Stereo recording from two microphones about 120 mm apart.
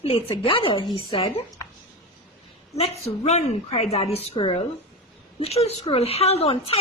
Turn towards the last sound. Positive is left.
turn(degrees=55)  # may be behind; listen again after turning